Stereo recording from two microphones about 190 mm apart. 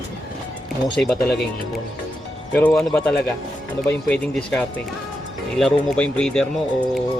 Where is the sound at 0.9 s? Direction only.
Centre (ahead or behind).